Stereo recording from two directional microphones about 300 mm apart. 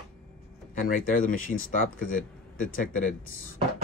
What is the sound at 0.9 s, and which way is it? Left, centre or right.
Speech, left.